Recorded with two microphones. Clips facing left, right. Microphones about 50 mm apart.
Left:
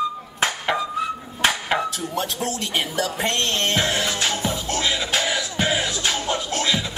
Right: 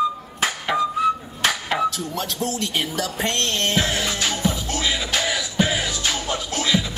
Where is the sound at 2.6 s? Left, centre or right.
Centre.